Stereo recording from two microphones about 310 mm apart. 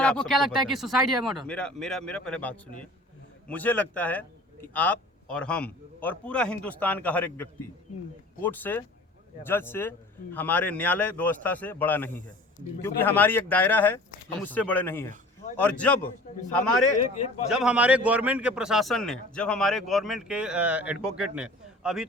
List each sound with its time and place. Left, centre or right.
0.0 s a man's voice: centre
17.2 s a man's voice: left
17.5 s a man's voice: centre